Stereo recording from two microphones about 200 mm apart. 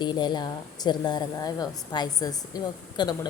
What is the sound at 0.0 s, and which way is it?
A woman's voice, 20° left (ahead or behind).